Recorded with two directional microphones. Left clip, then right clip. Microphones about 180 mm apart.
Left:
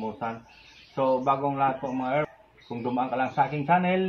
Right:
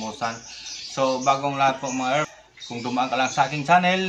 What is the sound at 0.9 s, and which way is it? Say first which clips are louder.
A man's voice: right 3 dB; 25° right (ahead or behind).